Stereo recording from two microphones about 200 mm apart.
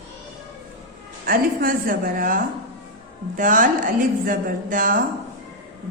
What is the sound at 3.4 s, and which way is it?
A woman's voice, 40° right (ahead or behind).